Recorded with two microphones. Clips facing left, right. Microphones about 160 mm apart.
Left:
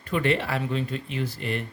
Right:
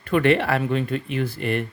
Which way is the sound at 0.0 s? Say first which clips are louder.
Right 6 dB; 65° right (ahead or behind).